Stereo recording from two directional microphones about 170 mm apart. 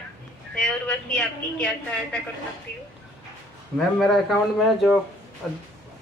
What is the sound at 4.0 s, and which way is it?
A woman's voice, centre (ahead or behind).